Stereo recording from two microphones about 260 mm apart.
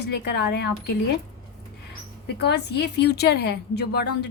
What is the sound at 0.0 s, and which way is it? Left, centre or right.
Speech, left.